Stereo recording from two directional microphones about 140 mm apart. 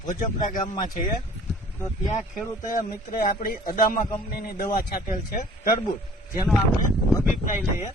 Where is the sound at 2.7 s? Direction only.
90° left.